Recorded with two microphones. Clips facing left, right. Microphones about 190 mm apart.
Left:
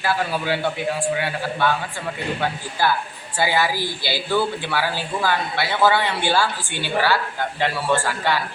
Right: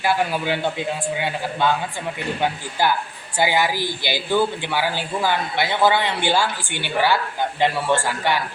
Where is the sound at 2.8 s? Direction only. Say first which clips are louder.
Right 1 dB; 15° right (ahead or behind).